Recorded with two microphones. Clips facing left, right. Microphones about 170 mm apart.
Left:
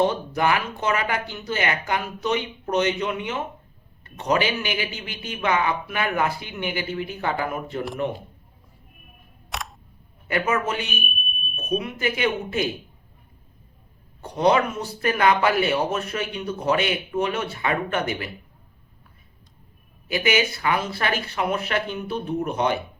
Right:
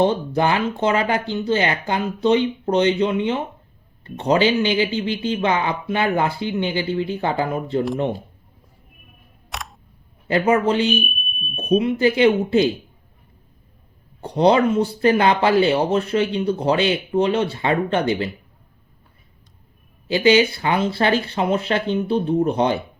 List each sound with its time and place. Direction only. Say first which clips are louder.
0.0 s speech: right 3 dB; 30° right (ahead or behind)
9.5 s camera: even; centre (ahead or behind)
10.2 s speech: right 7 dB; 30° right (ahead or behind)
11.0 s smoke detector: right 3 dB; centre (ahead or behind)
11.5 s speech: right 8 dB; 30° right (ahead or behind)
14.2 s speech: right 4 dB; 30° right (ahead or behind)
20.1 s speech: right 7 dB; 30° right (ahead or behind)